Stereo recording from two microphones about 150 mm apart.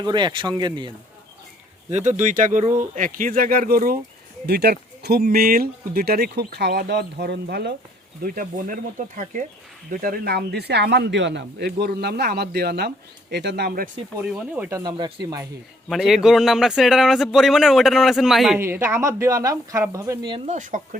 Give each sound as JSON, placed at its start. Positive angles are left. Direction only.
{"t": 0.0, "sound": "speech", "side_deg": -30}
{"t": 1.9, "sound": "speech", "side_deg": -50}
{"t": 4.4, "sound": "speech", "side_deg": -90}
{"t": 8.2, "sound": "speech", "side_deg": -70}
{"t": 9.9, "sound": "speech", "side_deg": -80}
{"t": 14.3, "sound": "speech", "side_deg": -5}
{"t": 14.7, "sound": "speech", "side_deg": -25}
{"t": 15.9, "sound": "a man's voice", "side_deg": 0}
{"t": 18.6, "sound": "speech", "side_deg": -15}
{"t": 20.5, "sound": "speech", "side_deg": -55}